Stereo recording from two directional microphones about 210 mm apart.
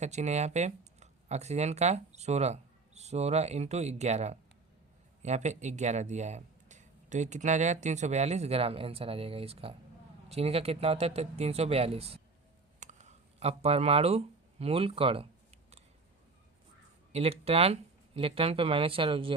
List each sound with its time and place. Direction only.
0.0 s speech: 35° right (ahead or behind)
17.1 s speech: 30° right (ahead or behind)